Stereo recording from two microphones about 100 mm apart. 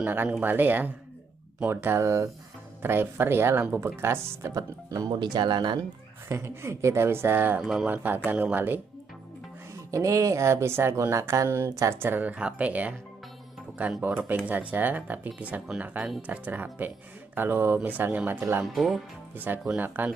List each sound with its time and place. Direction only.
0.0 s speech: 20° right (ahead or behind)
4.5 s speech: 40° right (ahead or behind)
6.2 s speech: 25° right (ahead or behind)
9.8 s speech: 30° right (ahead or behind); by 12.9 s 15° right (ahead or behind)
14.0 s speech: 20° right (ahead or behind)
18.7 s speech: centre (ahead or behind)
19.3 s speech: 20° right (ahead or behind)